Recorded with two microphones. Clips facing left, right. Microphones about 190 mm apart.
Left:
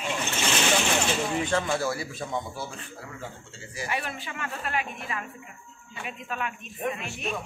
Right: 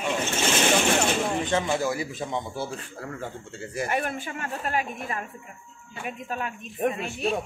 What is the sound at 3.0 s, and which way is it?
Speech, 50° right (ahead or behind).